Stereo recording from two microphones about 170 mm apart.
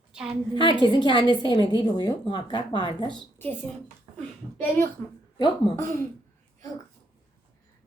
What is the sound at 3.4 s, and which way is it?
Speech, 10° left (ahead or behind).